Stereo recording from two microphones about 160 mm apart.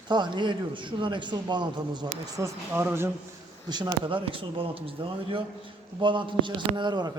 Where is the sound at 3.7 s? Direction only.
30° right (ahead or behind).